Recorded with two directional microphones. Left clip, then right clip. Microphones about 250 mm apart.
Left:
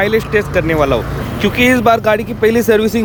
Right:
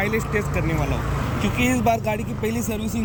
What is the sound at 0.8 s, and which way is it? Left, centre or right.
Speech, left.